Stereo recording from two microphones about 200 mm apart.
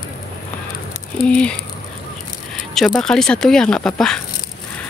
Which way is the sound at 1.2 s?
5° left (ahead or behind).